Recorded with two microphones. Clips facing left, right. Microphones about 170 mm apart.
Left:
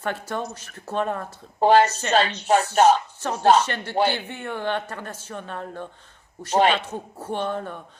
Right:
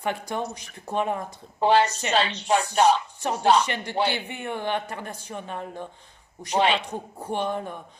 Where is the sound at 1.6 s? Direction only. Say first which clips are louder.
Left 3 dB; 45° left (ahead or behind).